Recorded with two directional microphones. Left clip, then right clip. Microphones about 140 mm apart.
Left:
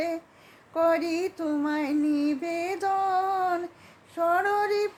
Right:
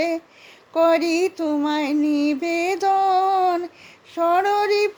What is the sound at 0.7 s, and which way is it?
Music, 40° right (ahead or behind).